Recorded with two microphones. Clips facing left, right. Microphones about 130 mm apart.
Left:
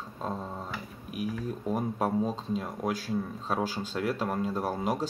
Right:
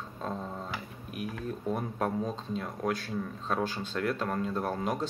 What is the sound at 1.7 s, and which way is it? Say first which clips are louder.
Speech: left 2 dB; 10° left (ahead or behind).